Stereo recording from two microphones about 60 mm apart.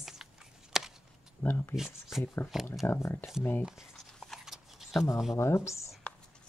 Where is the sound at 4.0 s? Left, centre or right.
Centre.